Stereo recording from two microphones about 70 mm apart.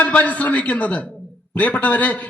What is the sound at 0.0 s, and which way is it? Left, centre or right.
A man's voice, left.